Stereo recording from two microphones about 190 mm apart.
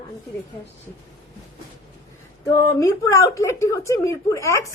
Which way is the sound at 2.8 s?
15° left (ahead or behind).